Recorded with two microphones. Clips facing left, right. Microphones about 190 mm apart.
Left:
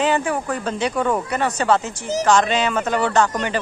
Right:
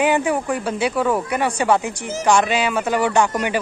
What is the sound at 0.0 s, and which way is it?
Speech, 15° right (ahead or behind).